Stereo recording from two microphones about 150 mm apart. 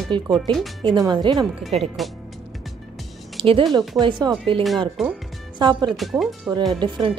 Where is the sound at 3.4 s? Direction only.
35° right (ahead or behind).